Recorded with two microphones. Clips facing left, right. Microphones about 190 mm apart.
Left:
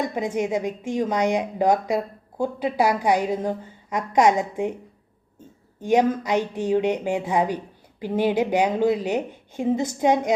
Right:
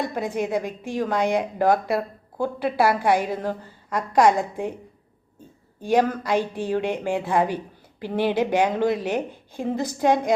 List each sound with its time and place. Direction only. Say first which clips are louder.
0.0 s a woman's voice: left 1 dB; 20° left (ahead or behind)
5.8 s a woman's voice: left 1 dB; 20° left (ahead or behind)